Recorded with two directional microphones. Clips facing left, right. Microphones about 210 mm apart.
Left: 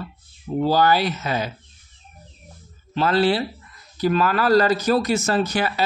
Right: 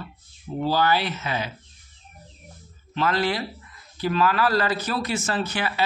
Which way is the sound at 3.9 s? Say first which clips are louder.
Left 2 dB; 45° left (ahead or behind).